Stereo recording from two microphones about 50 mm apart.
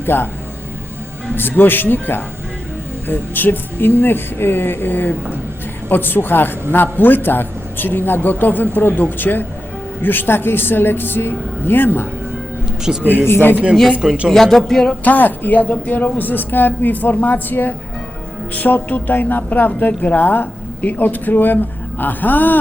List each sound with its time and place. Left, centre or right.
0.0 s speech: left
1.4 s a man's voice: left
12.9 s speech: centre
13.2 s a man's voice: left
14.3 s a man's voice: centre
15.0 s speech: left